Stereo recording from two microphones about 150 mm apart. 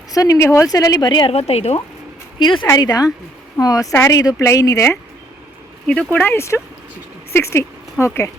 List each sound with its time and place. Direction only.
0.1 s speech: 20° left (ahead or behind)
1.3 s a woman's voice: 45° left (ahead or behind)
2.4 s speech: 35° left (ahead or behind)
5.8 s speech: 10° left (ahead or behind)